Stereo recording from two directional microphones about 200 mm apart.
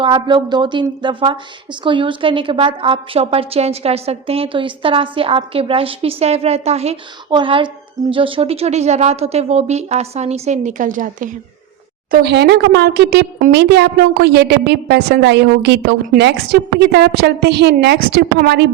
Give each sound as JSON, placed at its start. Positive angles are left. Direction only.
{"t": 0.0, "sound": "a woman's voice", "side_deg": -25}
{"t": 12.1, "sound": "a woman's voice", "side_deg": -55}